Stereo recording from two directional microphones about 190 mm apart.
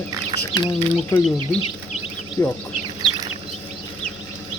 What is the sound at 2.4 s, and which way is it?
Speech, 15° left (ahead or behind).